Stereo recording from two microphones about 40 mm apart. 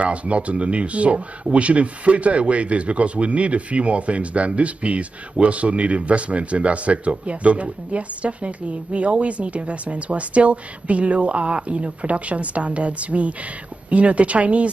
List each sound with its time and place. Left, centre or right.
0.0 s speech: right